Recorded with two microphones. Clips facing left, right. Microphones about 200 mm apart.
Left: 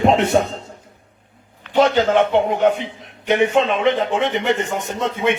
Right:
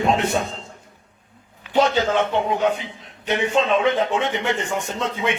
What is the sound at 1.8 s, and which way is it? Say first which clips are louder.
A man's voice: left 4 dB; 55° left (ahead or behind).